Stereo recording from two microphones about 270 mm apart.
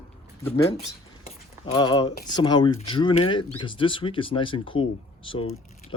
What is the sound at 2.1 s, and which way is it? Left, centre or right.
Speech, left.